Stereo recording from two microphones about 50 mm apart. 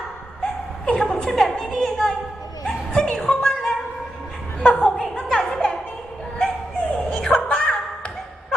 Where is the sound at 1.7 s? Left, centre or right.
Centre.